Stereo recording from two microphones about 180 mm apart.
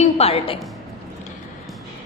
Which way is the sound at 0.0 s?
35° left (ahead or behind).